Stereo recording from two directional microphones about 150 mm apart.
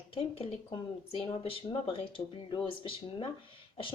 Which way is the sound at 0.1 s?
35° left (ahead or behind).